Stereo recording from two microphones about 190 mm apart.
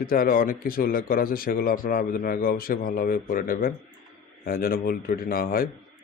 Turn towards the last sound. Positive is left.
turn(degrees=50)  # may be behind; listen again after turning